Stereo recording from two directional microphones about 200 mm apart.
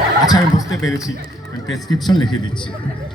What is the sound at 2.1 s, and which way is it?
Speech, 20° left (ahead or behind).